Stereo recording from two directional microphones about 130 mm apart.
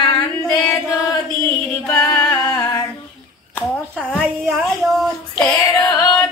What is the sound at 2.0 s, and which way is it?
Singing, 25° left (ahead or behind).